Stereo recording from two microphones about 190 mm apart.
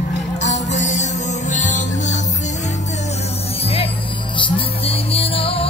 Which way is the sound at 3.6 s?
30° left (ahead or behind).